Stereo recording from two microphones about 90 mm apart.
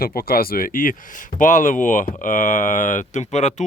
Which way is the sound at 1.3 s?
90° left.